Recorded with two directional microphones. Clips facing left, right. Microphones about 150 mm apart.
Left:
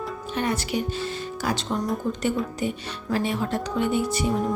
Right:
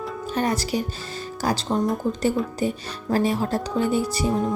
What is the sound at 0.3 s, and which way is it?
Speech, 40° right (ahead or behind).